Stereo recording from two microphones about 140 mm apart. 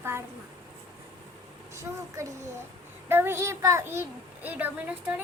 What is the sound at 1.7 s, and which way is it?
A child's voice, 20° right (ahead or behind).